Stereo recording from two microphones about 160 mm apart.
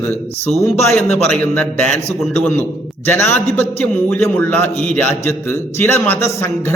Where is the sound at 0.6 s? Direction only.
15° left (ahead or behind).